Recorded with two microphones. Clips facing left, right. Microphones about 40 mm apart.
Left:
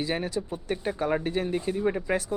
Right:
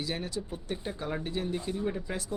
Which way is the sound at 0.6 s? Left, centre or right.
Left.